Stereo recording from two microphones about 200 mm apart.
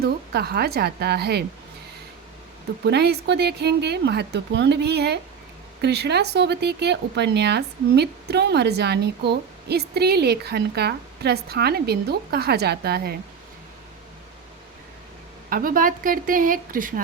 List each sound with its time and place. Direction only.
0.0 s a woman's voice: 55° right (ahead or behind)
2.8 s a woman's voice: 55° right (ahead or behind)
15.4 s a woman's voice: 45° right (ahead or behind)